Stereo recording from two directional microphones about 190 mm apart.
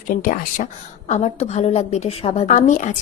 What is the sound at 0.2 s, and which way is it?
A woman's voice, 45° left (ahead or behind).